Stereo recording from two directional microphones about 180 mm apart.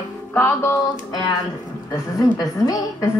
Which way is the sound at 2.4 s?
20° left (ahead or behind).